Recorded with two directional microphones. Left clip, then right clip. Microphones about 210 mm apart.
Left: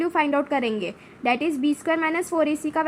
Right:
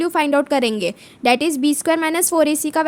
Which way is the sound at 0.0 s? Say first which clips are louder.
Right 5 dB; 45° right (ahead or behind).